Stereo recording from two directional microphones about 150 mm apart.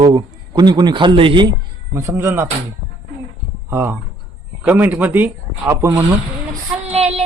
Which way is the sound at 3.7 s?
15° right (ahead or behind).